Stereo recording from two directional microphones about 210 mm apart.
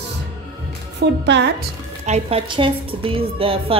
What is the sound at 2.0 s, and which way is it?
A woman's voice, 30° right (ahead or behind).